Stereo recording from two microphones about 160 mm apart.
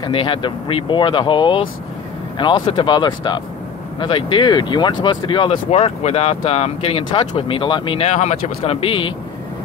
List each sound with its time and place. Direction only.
0.0 s speech: 35° left (ahead or behind)
5.7 s speech: 45° left (ahead or behind)